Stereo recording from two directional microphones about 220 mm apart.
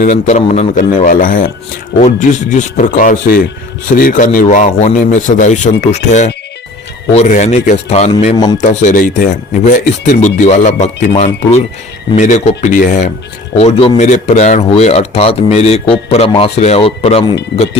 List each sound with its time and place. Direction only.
0.0 s speech: 35° left (ahead or behind)